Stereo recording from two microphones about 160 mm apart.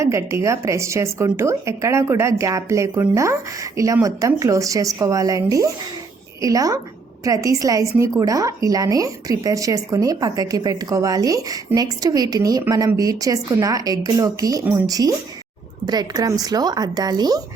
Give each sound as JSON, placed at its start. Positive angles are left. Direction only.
{"t": 0.0, "sound": "a woman's voice", "side_deg": -20}